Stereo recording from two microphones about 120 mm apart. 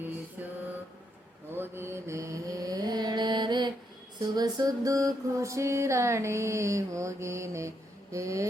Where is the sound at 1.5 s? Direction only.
20° right (ahead or behind); by 3.7 s 40° right (ahead or behind).